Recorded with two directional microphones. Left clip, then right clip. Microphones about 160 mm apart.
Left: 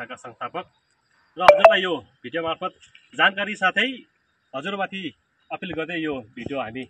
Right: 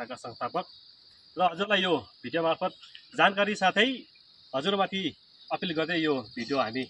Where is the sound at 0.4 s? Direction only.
25° right (ahead or behind).